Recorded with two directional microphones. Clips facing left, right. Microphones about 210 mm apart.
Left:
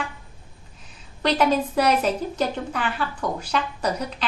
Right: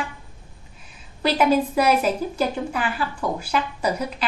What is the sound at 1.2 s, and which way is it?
A woman's voice, 5° right (ahead or behind).